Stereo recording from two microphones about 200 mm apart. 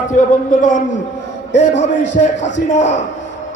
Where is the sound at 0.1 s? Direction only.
40° left (ahead or behind).